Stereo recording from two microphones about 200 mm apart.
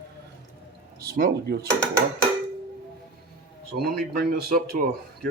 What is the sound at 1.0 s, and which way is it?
Speech, 45° right (ahead or behind).